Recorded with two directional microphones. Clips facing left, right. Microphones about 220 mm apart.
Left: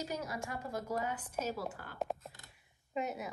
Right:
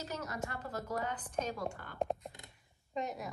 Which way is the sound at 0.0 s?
10° left (ahead or behind).